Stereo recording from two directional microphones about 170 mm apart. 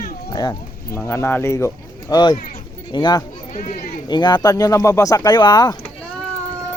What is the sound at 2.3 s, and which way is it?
Speech, 55° left (ahead or behind).